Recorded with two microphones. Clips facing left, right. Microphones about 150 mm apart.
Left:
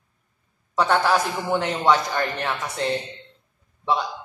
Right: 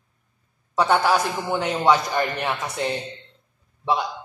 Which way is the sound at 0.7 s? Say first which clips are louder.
Right 1 dB; 5° right (ahead or behind).